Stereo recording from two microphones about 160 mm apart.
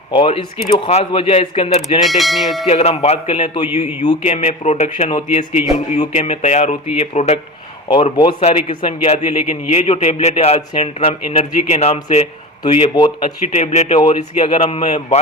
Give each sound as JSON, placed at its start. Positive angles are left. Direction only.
{"t": 0.1, "sound": "a man's voice", "side_deg": 35}
{"t": 2.0, "sound": "speech", "side_deg": 0}
{"t": 2.6, "sound": "a man's voice", "side_deg": 40}
{"t": 8.1, "sound": "speech", "side_deg": 25}
{"t": 8.4, "sound": "a man's voice", "side_deg": 40}
{"t": 13.2, "sound": "a man's voice", "side_deg": 45}